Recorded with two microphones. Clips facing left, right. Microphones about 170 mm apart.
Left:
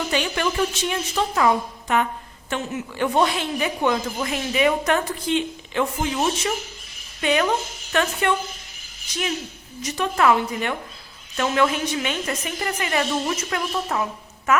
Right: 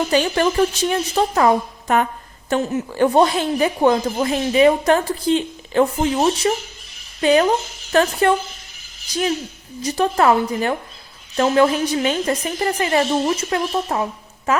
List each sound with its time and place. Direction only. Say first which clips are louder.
0.1 s a woman's voice: right 6 dB; 40° right (ahead or behind)